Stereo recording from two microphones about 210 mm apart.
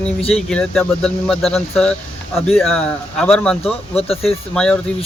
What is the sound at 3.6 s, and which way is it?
Speech, 30° left (ahead or behind).